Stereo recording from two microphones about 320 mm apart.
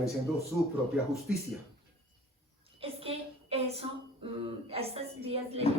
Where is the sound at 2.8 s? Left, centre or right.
Centre.